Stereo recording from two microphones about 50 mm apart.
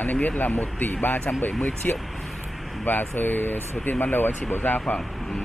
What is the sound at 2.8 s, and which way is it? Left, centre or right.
Speech, left.